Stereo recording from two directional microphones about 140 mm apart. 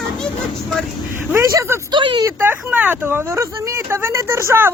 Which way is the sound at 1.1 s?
20° right (ahead or behind).